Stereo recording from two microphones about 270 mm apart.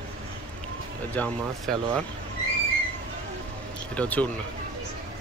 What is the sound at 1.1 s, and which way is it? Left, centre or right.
Speech, centre.